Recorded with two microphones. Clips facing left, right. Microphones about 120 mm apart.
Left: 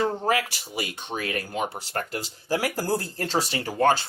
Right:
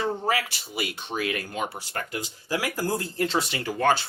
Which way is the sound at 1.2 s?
35° left (ahead or behind).